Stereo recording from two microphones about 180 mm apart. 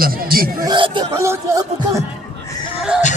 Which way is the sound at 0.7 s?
25° right (ahead or behind).